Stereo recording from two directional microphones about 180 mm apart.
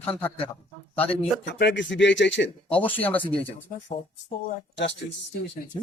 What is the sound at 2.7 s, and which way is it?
Speech, 10° left (ahead or behind).